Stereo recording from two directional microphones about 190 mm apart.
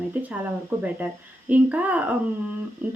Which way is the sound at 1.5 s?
10° right (ahead or behind).